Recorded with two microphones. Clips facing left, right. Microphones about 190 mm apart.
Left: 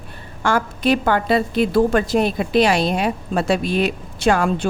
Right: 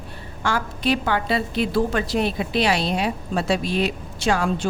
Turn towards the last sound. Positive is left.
turn(degrees=55)  # may be behind; listen again after turning